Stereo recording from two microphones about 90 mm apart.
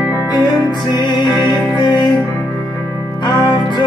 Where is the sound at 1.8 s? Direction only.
60° left (ahead or behind).